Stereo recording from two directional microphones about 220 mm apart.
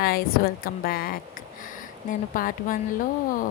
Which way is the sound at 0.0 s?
40° left (ahead or behind).